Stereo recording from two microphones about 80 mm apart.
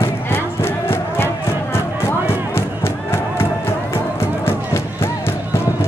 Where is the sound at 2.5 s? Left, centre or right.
Left.